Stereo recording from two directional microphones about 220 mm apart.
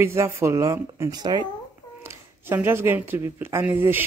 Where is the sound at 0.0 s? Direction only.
10° right (ahead or behind).